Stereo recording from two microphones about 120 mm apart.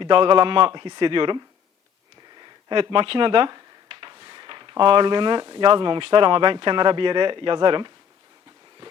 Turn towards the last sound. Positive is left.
turn(degrees=-40)  # may be behind; listen again after turning